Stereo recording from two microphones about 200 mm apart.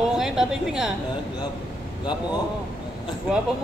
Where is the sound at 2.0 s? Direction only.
20° left (ahead or behind).